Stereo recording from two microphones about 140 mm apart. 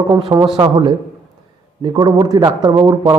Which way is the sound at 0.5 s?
35° right (ahead or behind).